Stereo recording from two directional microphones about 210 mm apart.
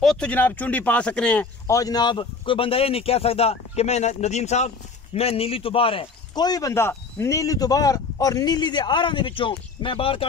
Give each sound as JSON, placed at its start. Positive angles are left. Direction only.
{"t": 0.0, "sound": "speech", "side_deg": 5}